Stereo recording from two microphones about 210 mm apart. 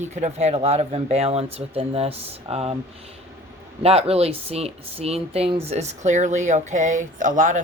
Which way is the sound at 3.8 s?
30° right (ahead or behind).